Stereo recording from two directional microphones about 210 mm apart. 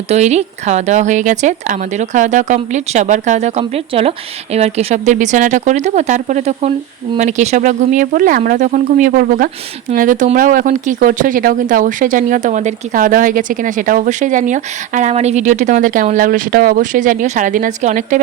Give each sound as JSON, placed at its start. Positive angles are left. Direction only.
{"t": 0.1, "sound": "speech", "side_deg": -30}